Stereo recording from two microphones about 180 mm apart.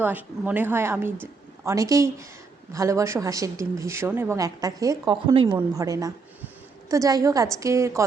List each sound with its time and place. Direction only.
0.0 s a woman's voice: 10° right (ahead or behind)